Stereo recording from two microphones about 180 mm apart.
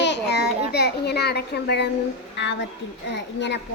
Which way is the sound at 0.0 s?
70° left (ahead or behind).